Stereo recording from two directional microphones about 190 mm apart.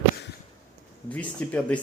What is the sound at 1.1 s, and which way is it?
Speech, 5° left (ahead or behind).